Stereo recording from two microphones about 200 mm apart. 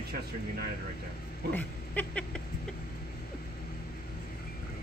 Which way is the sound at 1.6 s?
5° left (ahead or behind).